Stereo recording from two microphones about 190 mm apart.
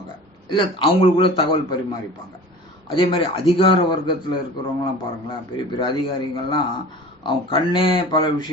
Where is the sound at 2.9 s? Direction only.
25° left (ahead or behind).